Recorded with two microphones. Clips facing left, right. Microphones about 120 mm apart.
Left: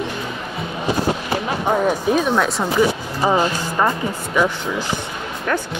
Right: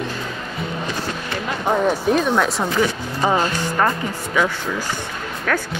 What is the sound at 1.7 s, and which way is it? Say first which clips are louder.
Speech: even; 5° left (ahead or behind).